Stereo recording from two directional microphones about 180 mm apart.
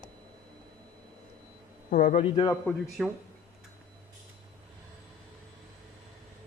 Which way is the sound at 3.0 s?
Centre (ahead or behind).